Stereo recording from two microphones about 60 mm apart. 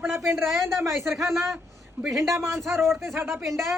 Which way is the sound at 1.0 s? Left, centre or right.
Right.